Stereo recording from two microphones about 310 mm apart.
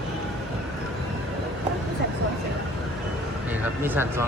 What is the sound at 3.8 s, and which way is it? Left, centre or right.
Speech, centre.